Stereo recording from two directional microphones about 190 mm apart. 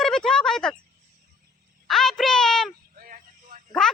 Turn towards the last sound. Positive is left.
turn(degrees=-45)  # may be behind; listen again after turning